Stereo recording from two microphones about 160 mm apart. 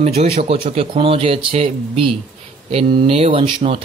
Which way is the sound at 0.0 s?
40° right (ahead or behind).